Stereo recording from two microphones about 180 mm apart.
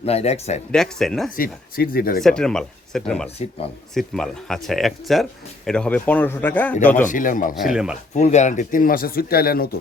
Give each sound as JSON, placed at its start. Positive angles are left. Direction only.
{"t": 0.0, "sound": "speech", "side_deg": 35}
{"t": 0.7, "sound": "speech", "side_deg": 0}
{"t": 1.4, "sound": "speech", "side_deg": 55}
{"t": 2.2, "sound": "speech", "side_deg": 5}
{"t": 7.0, "sound": "speech", "side_deg": 45}
{"t": 7.5, "sound": "speech", "side_deg": 0}
{"t": 8.1, "sound": "speech", "side_deg": 40}